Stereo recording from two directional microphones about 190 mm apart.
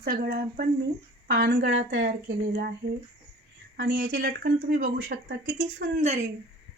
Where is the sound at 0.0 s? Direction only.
55° right (ahead or behind).